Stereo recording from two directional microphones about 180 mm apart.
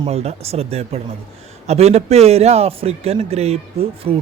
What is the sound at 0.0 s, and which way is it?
A man's voice, 35° right (ahead or behind).